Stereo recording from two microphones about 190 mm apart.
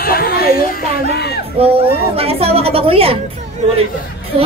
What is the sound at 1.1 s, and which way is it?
Music, 55° left (ahead or behind).